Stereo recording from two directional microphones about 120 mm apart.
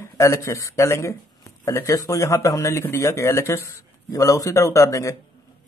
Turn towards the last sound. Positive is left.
turn(degrees=25)  # may be behind; listen again after turning